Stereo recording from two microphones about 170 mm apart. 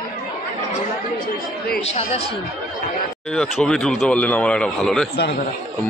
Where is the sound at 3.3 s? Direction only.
5° left (ahead or behind).